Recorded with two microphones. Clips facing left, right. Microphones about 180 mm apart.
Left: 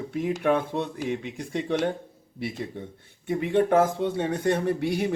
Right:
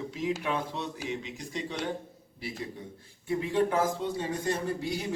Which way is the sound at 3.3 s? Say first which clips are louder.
Left 6 dB; 60° left (ahead or behind).